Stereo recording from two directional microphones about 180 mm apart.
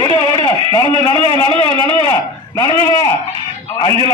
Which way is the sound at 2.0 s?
20° left (ahead or behind).